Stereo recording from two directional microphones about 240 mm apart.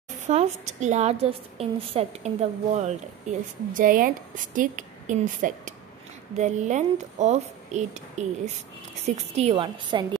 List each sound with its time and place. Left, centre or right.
0.3 s a woman's voice: right